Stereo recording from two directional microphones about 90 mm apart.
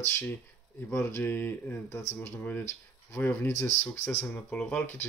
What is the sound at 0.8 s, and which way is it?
Speech, 25° left (ahead or behind).